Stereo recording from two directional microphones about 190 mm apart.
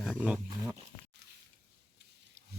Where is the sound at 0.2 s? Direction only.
5° right (ahead or behind).